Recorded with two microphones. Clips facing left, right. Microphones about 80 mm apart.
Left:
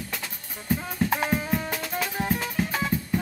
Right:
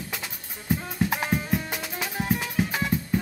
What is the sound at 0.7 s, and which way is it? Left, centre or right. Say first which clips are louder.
Drum: left 1 dB; centre.